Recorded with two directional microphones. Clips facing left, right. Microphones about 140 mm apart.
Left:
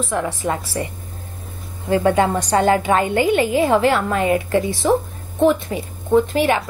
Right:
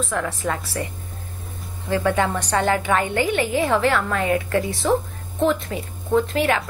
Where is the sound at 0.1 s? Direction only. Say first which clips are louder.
Left 3 dB; 20° left (ahead or behind).